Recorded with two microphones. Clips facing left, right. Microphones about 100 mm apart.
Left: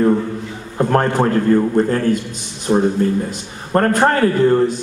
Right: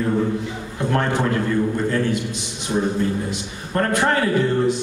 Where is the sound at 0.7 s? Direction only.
45° left (ahead or behind).